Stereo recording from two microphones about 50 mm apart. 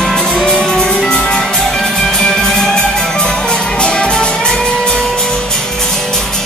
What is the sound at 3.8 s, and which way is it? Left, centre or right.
Music, centre.